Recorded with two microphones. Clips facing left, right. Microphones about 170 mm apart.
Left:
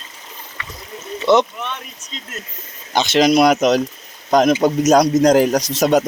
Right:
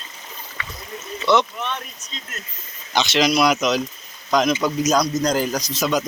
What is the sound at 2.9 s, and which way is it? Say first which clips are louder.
Speech: left 5 dB; 50° left (ahead or behind).